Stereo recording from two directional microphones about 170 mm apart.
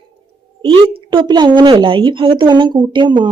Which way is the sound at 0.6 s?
30° right (ahead or behind).